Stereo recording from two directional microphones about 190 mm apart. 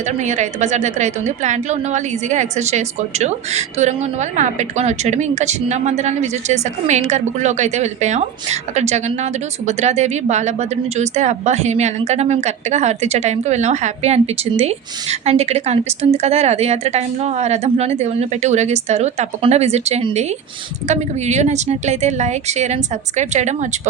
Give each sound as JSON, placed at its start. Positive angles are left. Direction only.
{"t": 0.3, "sound": "a woman's voice", "side_deg": -40}